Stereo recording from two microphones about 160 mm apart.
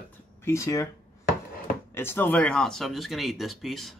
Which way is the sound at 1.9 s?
15° left (ahead or behind).